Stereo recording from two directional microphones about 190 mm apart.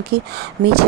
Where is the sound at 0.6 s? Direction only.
45° right (ahead or behind).